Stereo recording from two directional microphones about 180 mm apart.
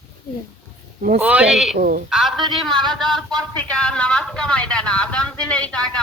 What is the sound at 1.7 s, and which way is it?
Speech, 55° right (ahead or behind).